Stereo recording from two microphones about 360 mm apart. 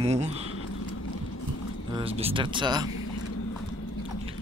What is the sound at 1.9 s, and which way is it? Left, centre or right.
Speech, centre.